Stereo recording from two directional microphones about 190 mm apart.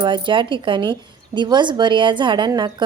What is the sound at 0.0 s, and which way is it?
A woman's voice, 25° right (ahead or behind).